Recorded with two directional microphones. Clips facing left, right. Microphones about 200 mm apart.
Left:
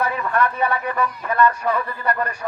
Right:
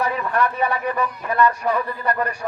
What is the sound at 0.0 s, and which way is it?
A man's voice, 15° right (ahead or behind).